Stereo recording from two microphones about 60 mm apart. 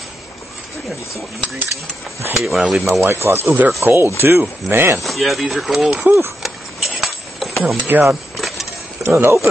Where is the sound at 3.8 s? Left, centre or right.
Right.